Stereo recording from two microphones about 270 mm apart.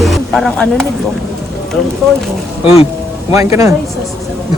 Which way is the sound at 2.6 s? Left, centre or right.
Left.